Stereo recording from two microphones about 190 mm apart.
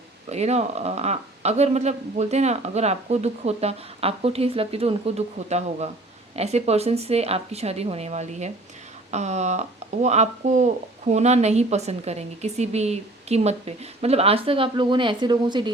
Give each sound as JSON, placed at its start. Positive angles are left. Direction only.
{"t": 0.3, "sound": "speech", "side_deg": -35}